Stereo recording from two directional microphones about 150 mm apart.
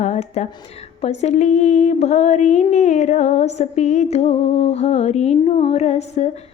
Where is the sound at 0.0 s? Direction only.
50° left (ahead or behind).